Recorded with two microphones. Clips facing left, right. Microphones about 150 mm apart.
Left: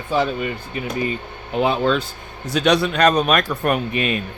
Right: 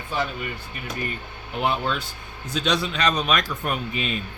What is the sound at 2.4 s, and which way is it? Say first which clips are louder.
Speech: left 7 dB; 75° left (ahead or behind).